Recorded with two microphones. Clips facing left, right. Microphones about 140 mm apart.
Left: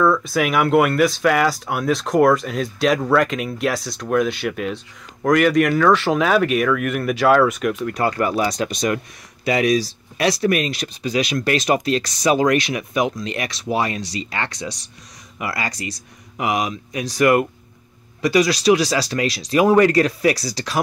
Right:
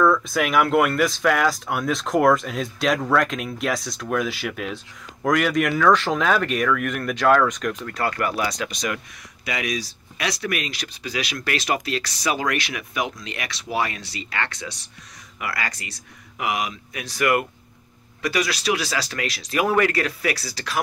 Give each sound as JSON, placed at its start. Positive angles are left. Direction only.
{"t": 0.0, "sound": "speech", "side_deg": 5}
{"t": 8.5, "sound": "speech", "side_deg": 40}
{"t": 11.0, "sound": "speech", "side_deg": 25}